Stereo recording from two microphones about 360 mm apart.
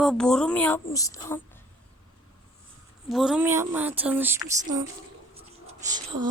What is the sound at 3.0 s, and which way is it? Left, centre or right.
A woman's voice, centre.